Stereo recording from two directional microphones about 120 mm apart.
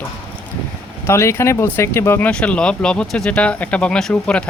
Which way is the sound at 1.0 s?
20° left (ahead or behind).